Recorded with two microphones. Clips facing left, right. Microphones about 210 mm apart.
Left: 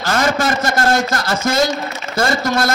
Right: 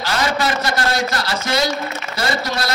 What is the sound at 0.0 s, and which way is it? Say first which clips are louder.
A man's voice: left 3 dB; 45° left (ahead or behind).